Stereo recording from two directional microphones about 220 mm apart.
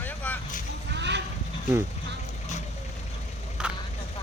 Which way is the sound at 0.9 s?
50° right (ahead or behind).